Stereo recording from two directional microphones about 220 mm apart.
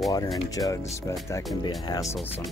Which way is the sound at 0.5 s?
15° left (ahead or behind).